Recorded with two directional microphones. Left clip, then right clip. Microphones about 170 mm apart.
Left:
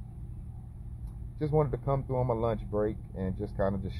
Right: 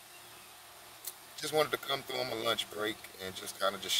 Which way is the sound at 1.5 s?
45° right (ahead or behind).